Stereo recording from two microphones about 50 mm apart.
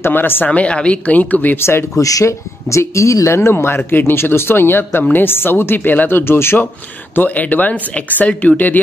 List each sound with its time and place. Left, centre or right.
0.0 s speech: left
0.5 s a woman's voice: left
1.6 s speech: left
2.2 s speech: left
7.2 s a woman's voice: left